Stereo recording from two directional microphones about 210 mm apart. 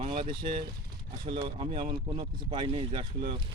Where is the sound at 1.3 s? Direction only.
25° right (ahead or behind).